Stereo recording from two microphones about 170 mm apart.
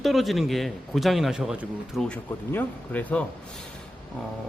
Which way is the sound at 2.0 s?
10° left (ahead or behind).